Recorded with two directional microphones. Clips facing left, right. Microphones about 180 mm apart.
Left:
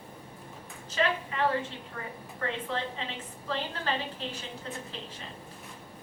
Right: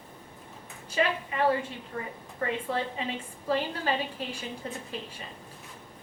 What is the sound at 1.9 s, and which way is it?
Speech, 30° right (ahead or behind).